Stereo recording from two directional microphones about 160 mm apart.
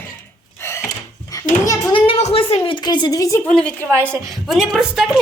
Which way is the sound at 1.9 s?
35° left (ahead or behind).